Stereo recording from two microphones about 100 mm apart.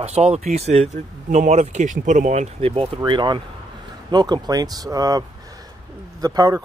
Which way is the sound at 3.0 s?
50° right (ahead or behind).